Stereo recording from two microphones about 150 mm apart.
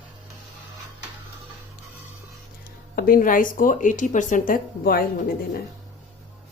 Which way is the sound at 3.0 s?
70° left (ahead or behind).